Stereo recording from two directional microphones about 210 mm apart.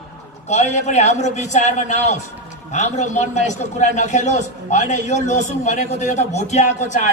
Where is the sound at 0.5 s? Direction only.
35° left (ahead or behind).